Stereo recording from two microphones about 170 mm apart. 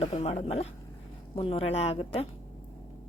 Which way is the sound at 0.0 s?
35° left (ahead or behind).